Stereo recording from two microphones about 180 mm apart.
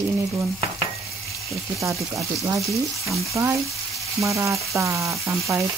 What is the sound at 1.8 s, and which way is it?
Frying, 15° right (ahead or behind).